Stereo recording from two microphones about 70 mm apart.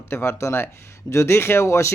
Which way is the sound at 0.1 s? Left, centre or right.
Left.